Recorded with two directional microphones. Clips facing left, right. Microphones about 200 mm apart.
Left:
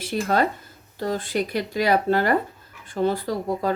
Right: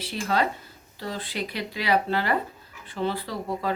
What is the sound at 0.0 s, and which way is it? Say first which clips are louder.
Speech: left 4 dB; 50° left (ahead or behind).